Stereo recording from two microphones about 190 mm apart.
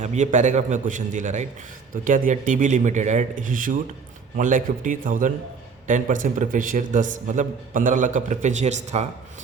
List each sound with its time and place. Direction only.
0.0 s speech: 40° right (ahead or behind)